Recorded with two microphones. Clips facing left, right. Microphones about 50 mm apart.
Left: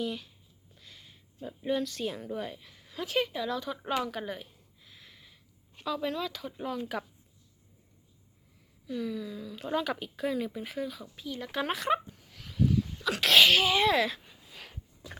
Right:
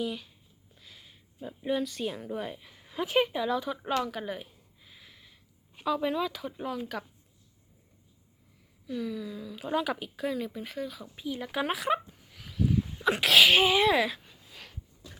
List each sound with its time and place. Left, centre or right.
0.0 s a woman's voice: centre
4.0 s speech: centre
4.4 s a sound: centre
8.9 s speech: centre
11.0 s speech: centre
12.7 s a sound: centre
13.2 s speech: centre
13.5 s speech: centre
13.7 s speech: centre
14.2 s a sound: centre